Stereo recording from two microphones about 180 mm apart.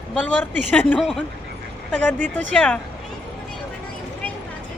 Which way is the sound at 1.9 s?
10° left (ahead or behind).